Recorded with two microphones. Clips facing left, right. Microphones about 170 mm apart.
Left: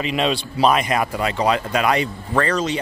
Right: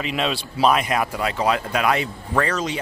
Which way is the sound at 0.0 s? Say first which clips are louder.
Left 3 dB; centre (ahead or behind).